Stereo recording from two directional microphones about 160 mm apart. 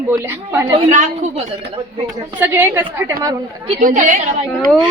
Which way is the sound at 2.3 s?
15° right (ahead or behind).